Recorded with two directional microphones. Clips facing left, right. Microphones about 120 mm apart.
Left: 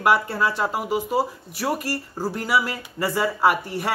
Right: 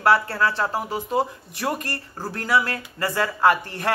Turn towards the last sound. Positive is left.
turn(degrees=10)  # may be behind; listen again after turning